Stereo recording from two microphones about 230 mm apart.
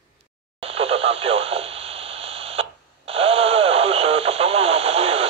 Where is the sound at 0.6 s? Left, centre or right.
Right.